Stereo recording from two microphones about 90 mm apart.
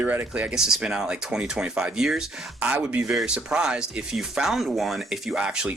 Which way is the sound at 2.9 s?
15° right (ahead or behind).